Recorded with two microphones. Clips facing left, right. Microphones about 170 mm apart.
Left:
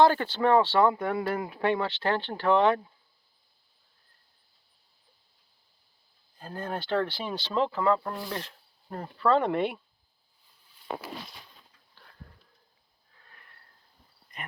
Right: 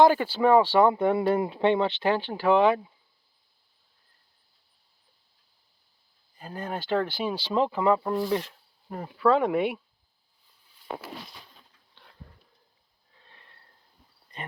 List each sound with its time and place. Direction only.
0.0 s speech: 10° right (ahead or behind)
6.4 s speech: 5° right (ahead or behind)
13.2 s sniff: 25° right (ahead or behind)